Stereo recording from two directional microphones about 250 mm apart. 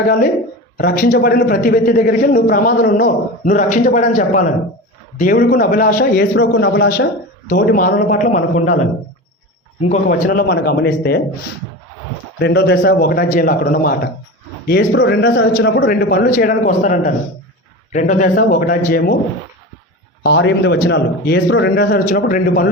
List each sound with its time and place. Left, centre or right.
0.8 s a man's voice: left
9.9 s a man's voice: left
12.4 s a man's voice: left
20.2 s a man's voice: left